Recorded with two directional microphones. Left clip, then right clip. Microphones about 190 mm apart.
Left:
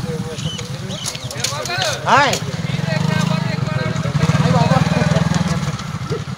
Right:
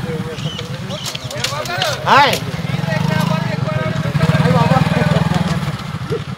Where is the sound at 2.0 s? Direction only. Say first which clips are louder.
Right 3 dB; 50° right (ahead or behind).